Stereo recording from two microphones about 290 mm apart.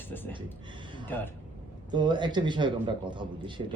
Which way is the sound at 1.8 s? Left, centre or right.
Centre.